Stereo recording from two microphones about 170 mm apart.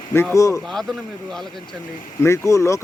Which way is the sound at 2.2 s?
15° left (ahead or behind).